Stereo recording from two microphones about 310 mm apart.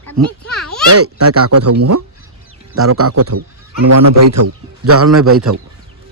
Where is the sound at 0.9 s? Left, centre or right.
Right.